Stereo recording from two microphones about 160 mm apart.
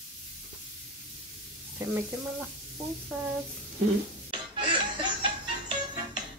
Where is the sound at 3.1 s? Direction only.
5° right (ahead or behind).